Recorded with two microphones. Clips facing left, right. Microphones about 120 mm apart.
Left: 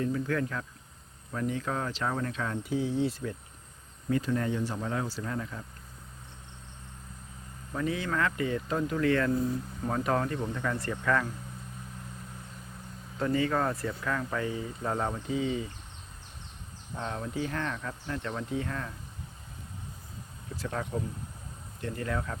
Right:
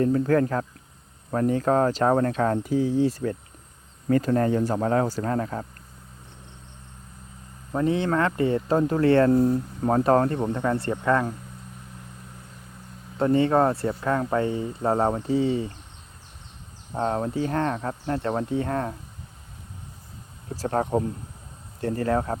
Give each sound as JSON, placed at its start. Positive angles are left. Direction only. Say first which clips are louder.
{"t": 0.0, "sound": "speech", "louder": "right 9 dB", "side_deg": -45}
{"t": 7.7, "sound": "speech", "louder": "right 8 dB", "side_deg": -30}
{"t": 9.3, "sound": "speech", "louder": "right 9 dB", "side_deg": -55}
{"t": 9.9, "sound": "speech", "louder": "right 9 dB", "side_deg": -40}
{"t": 13.1, "sound": "speech", "louder": "right 8 dB", "side_deg": -30}
{"t": 16.9, "sound": "speech", "louder": "right 10 dB", "side_deg": -40}
{"t": 20.6, "sound": "speech", "louder": "right 10 dB", "side_deg": -45}